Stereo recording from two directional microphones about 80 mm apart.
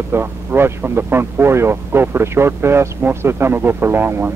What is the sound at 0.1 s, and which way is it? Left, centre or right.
Speech, right.